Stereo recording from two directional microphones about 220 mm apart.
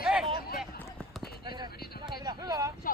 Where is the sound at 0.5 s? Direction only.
Centre (ahead or behind).